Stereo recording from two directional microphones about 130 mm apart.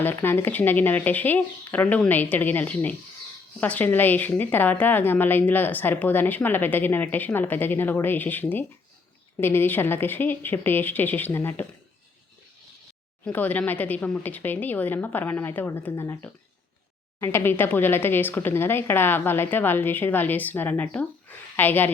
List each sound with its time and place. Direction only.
0.0 s a woman's voice: 15° left (ahead or behind)
13.2 s a woman's voice: 15° left (ahead or behind)